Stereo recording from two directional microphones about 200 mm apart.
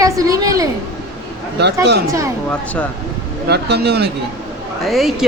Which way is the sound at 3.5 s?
55° right (ahead or behind).